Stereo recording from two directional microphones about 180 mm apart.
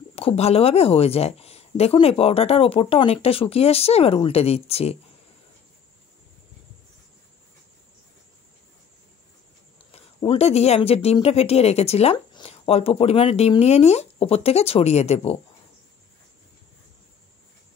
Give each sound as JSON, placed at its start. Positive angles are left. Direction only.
{"t": 0.1, "sound": "speech", "side_deg": 35}
{"t": 9.8, "sound": "speech", "side_deg": 35}